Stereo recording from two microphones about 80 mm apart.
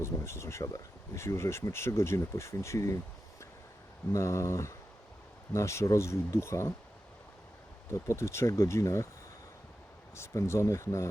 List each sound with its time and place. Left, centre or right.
0.0 s speech: left
4.1 s speech: left
8.0 s speech: left
10.2 s speech: left